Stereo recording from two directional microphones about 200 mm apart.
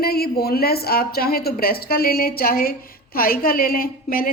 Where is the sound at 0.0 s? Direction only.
50° left (ahead or behind).